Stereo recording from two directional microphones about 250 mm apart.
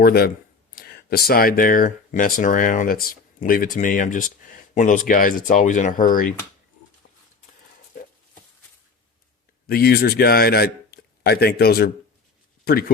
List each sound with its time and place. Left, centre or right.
0.0 s speech: left
9.6 s a man's voice: left